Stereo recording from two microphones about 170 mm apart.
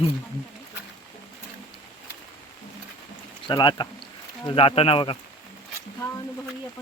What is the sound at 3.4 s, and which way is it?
Speech, 25° left (ahead or behind).